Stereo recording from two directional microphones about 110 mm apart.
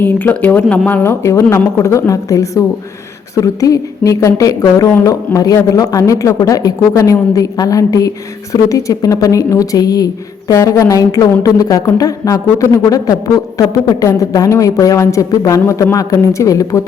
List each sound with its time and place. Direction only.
0.0 s speech: 15° left (ahead or behind)
1.2 s a woman's voice: 25° left (ahead or behind)